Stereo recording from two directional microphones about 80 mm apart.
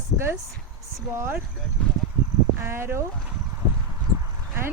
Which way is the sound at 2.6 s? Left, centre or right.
Right.